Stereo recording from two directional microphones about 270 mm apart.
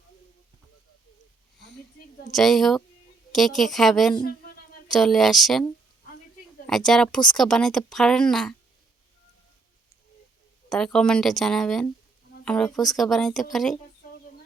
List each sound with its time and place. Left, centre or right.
2.3 s speech: centre
4.2 s a sound: left
4.9 s speech: centre
6.7 s speech: centre
10.7 s speech: centre